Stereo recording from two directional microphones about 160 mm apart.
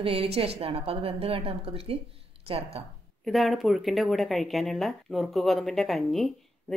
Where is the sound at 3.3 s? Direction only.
Centre (ahead or behind).